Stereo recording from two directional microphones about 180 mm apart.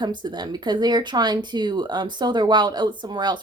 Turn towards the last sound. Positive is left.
turn(degrees=-25)  # may be behind; listen again after turning